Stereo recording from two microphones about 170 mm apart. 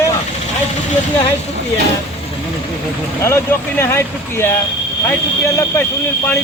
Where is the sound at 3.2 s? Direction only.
15° left (ahead or behind).